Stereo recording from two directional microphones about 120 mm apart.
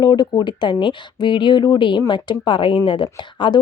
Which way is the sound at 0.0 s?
35° left (ahead or behind).